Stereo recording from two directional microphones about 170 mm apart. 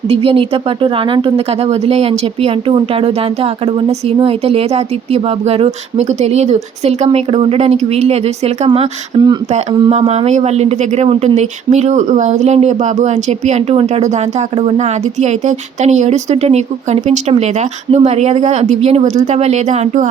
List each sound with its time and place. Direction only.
0.1 s speech: 35° right (ahead or behind)
9.5 s speech: 40° right (ahead or behind)